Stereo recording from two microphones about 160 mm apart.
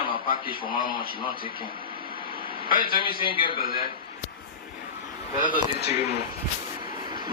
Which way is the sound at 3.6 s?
65° left (ahead or behind).